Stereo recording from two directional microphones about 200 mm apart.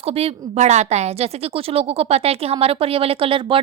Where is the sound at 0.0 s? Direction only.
30° right (ahead or behind).